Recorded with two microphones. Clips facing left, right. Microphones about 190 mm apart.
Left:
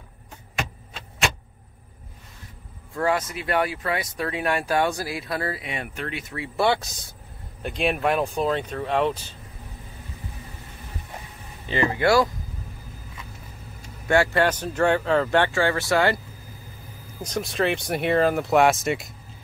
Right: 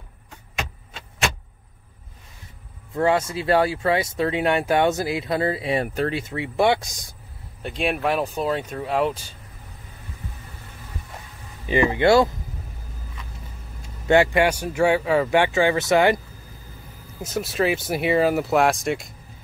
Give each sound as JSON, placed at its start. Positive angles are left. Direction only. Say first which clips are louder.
{"t": 2.9, "sound": "speech", "louder": "right 4 dB", "side_deg": -25}
{"t": 7.6, "sound": "speech", "louder": "even", "side_deg": 0}
{"t": 11.6, "sound": "speech", "louder": "right 4 dB", "side_deg": -15}
{"t": 14.0, "sound": "speech", "louder": "right 3 dB", "side_deg": -20}
{"t": 17.2, "sound": "speech", "louder": "right 2 dB", "side_deg": -5}